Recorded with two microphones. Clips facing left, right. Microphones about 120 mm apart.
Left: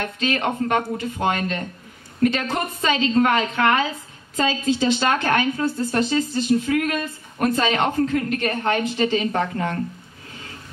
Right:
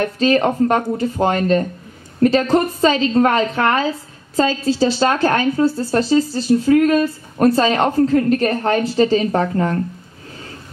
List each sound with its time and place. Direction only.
0.0 s a woman's voice: 35° right (ahead or behind)